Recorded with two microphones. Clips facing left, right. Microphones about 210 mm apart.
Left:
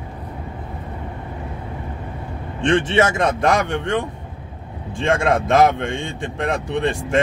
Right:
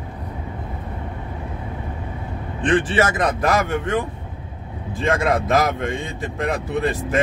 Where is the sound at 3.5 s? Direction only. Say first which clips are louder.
Left 1 dB; 5° right (ahead or behind).